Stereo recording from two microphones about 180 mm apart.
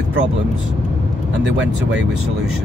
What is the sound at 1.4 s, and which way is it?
Speech, 85° right.